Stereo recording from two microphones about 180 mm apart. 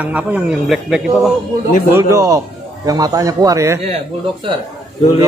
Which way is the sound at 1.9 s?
15° right (ahead or behind).